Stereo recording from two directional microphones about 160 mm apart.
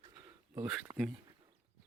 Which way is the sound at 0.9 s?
35° right (ahead or behind).